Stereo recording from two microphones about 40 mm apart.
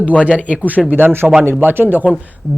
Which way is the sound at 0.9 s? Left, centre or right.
Right.